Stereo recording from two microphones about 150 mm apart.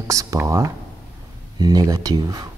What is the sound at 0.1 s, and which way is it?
Speech, 20° right (ahead or behind).